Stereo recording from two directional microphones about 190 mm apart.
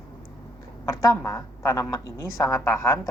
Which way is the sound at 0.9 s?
15° left (ahead or behind).